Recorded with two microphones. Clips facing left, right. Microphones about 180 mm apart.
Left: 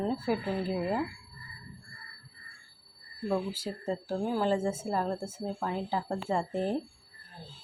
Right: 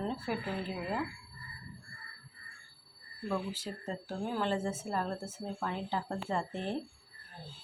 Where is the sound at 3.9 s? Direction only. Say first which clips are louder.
Left 6 dB; 30° left (ahead or behind).